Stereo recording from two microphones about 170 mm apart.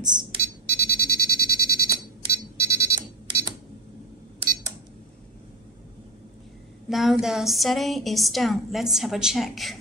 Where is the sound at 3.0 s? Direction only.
25° right (ahead or behind).